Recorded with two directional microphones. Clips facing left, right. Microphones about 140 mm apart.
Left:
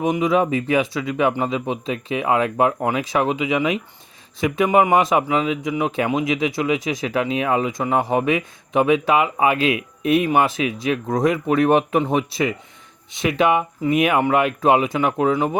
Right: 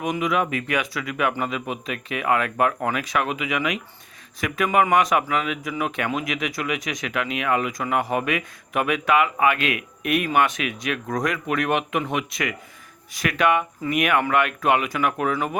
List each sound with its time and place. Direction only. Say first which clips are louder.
0.0 s speech: left 5 dB; 25° left (ahead or behind)